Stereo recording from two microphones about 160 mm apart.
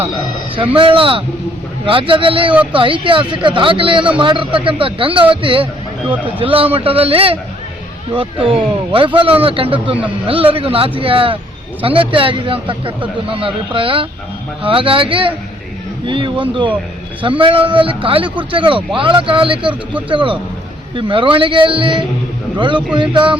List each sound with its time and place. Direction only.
0.8 s speech: 35° right (ahead or behind)